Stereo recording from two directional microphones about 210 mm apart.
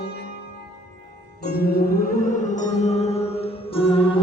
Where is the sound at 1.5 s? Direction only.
50° left (ahead or behind).